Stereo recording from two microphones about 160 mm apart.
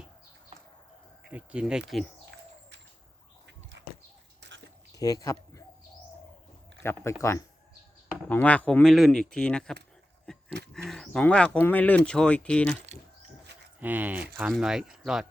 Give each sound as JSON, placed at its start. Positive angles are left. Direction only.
{"t": 1.3, "sound": "speech", "side_deg": -10}
{"t": 2.3, "sound": "bird", "side_deg": -90}
{"t": 4.4, "sound": "a sound", "side_deg": -90}
{"t": 4.9, "sound": "speech", "side_deg": 20}
{"t": 6.8, "sound": "speech", "side_deg": 15}
{"t": 10.8, "sound": "speech", "side_deg": 0}
{"t": 13.7, "sound": "speech", "side_deg": -10}